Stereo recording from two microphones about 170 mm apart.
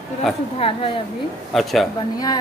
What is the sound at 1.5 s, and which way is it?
Speech, centre (ahead or behind).